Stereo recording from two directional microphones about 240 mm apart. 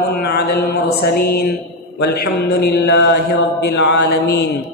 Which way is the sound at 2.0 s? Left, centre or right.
Left.